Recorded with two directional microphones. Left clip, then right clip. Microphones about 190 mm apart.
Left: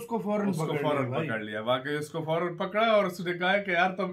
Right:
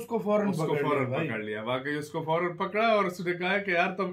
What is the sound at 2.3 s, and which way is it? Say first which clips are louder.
Speech: right 1 dB; 20° left (ahead or behind).